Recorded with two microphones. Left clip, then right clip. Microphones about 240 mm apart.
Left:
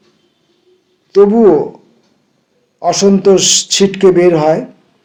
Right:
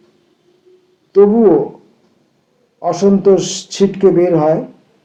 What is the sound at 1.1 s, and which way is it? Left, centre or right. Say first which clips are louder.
Speech: left 2 dB; left.